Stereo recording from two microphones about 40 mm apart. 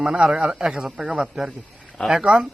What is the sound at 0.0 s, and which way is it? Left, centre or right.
Speech, centre.